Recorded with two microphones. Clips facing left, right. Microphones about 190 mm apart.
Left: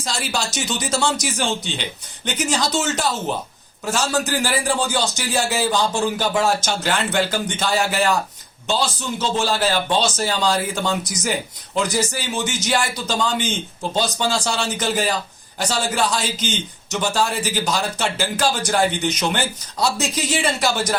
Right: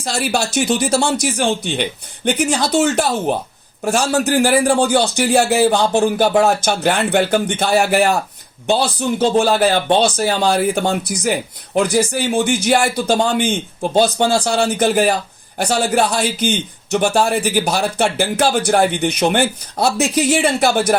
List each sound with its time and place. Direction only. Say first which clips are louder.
0.0 s speech: right 6 dB; 60° right (ahead or behind)